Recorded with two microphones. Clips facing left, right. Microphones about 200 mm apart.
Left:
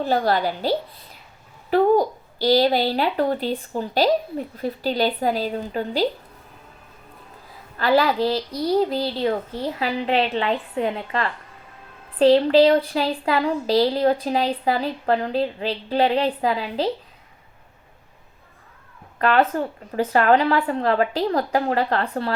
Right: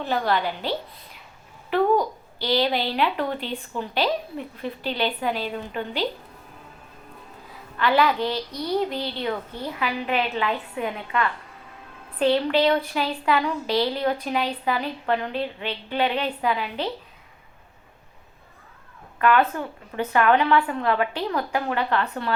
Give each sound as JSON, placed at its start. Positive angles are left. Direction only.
{"t": 0.0, "sound": "speech", "side_deg": 40}
{"t": 7.8, "sound": "speech", "side_deg": 35}
{"t": 19.4, "sound": "speech", "side_deg": 45}